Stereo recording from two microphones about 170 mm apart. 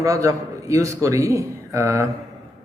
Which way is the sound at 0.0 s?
20° right (ahead or behind).